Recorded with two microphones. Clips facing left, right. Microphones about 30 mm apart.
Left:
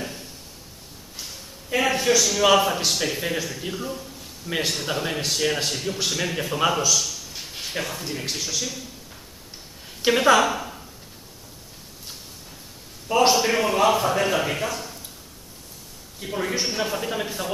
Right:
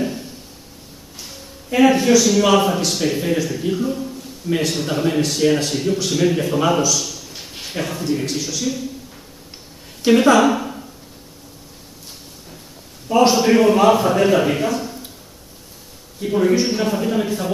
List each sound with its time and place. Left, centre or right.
0.0 s a sound: centre
1.7 s a man's voice: centre
10.0 s a woman's voice: centre
13.1 s a man's voice: centre
16.2 s a man's voice: centre